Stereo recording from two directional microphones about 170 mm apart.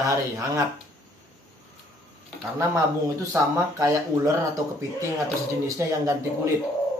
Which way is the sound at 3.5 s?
20° right (ahead or behind).